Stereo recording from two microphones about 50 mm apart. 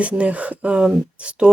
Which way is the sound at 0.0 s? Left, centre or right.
Right.